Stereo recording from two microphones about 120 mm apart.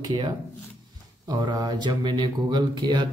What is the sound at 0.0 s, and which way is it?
Speech, 35° right (ahead or behind).